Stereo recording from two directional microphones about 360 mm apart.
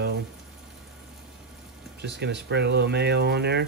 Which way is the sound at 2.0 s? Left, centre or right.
Right.